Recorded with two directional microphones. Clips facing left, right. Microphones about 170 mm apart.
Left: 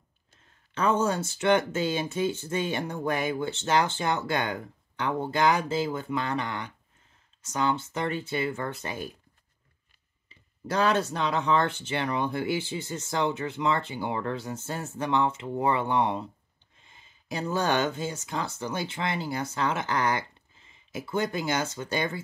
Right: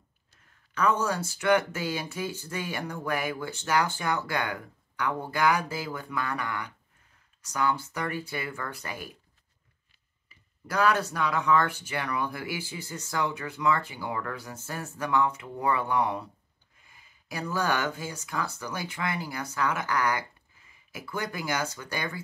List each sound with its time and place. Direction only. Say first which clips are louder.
0.7 s speech: left 1 dB; 25° left (ahead or behind)
10.2 s speech: left 8 dB; 25° left (ahead or behind)